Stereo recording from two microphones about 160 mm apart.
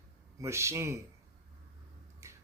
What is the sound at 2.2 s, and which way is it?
Tick-tock, 15° right (ahead or behind).